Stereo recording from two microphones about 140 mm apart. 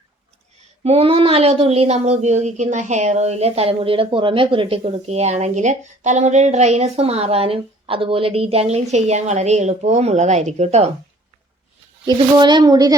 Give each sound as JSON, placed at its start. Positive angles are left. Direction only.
{"t": 0.9, "sound": "a woman's voice", "side_deg": -45}
{"t": 12.0, "sound": "a woman's voice", "side_deg": -30}